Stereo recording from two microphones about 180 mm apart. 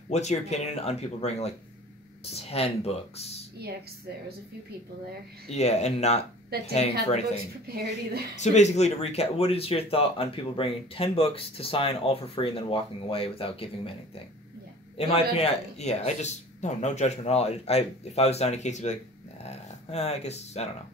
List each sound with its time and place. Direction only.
0.1 s speech: 40° left (ahead or behind)
5.5 s speech: 35° left (ahead or behind)
7.6 s speech: 60° right (ahead or behind)
8.4 s speech: 40° left (ahead or behind)
15.0 s speech: 35° left (ahead or behind)